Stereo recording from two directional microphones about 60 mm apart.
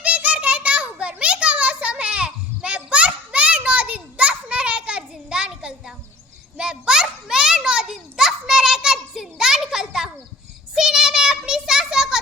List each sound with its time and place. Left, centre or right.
0.0 s children playing: right; by 10.1 s centre
10.8 s child singing: centre